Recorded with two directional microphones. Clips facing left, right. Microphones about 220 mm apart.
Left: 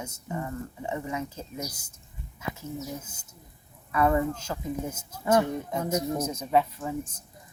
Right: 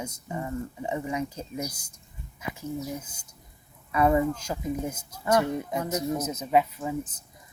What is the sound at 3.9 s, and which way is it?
A woman's voice, 15° right (ahead or behind).